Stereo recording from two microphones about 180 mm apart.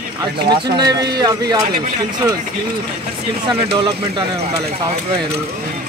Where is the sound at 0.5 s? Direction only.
25° right (ahead or behind).